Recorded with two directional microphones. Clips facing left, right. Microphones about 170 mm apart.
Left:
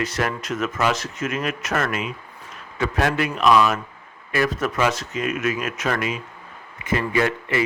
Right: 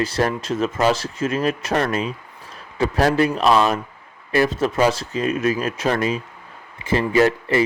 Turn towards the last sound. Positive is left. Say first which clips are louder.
# right 5 dB
turn(degrees=-35)  # may be behind; listen again after turning